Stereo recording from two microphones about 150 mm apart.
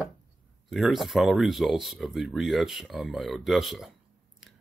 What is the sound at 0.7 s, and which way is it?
Speech, centre (ahead or behind).